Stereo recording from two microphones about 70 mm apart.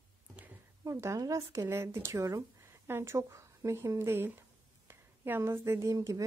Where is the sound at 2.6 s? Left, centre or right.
Right.